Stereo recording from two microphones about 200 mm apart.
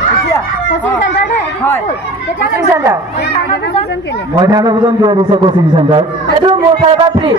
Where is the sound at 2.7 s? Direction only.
15° right (ahead or behind).